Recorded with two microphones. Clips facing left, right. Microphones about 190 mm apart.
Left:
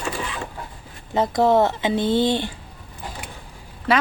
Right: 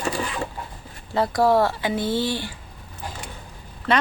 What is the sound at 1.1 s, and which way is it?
Speech, 20° left (ahead or behind).